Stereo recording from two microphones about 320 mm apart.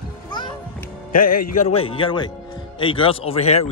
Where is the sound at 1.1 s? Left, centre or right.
Left.